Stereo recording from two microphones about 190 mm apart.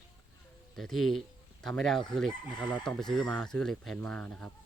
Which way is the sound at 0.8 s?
Centre (ahead or behind).